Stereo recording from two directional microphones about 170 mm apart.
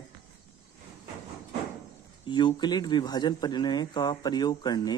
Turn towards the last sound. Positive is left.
turn(degrees=25)  # may be behind; listen again after turning